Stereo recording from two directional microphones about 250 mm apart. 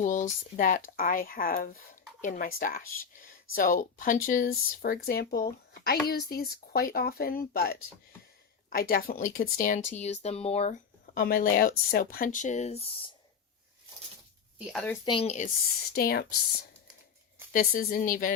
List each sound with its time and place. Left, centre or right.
0.0 s speech: left
14.7 s a woman's voice: centre
15.0 s speech: left
16.0 s speech: left
17.5 s speech: left